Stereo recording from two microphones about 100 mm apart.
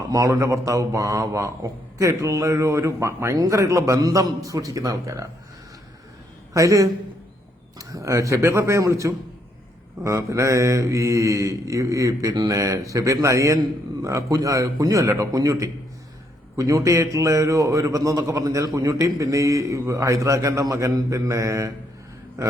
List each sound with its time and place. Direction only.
0.1 s a man's voice: 35° right (ahead or behind)
6.5 s a man's voice: 35° right (ahead or behind)